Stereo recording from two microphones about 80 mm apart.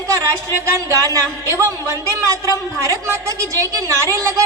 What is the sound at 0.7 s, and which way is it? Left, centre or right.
Speech, right.